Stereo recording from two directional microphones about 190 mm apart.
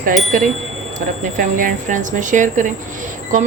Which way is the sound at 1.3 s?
45° right (ahead or behind).